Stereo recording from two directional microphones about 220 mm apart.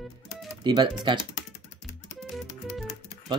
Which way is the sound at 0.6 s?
20° right (ahead or behind).